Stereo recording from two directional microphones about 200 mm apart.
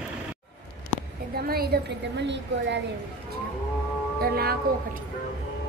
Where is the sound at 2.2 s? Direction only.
60° right (ahead or behind).